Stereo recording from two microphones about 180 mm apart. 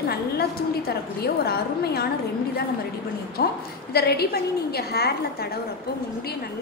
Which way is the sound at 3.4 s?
60° left (ahead or behind).